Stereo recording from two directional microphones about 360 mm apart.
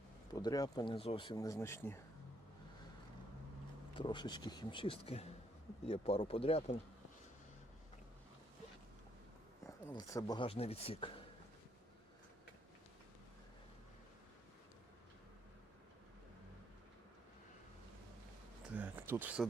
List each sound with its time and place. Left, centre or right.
0.3 s speech: centre
3.9 s speech: centre
9.6 s speech: centre
18.7 s a sound: centre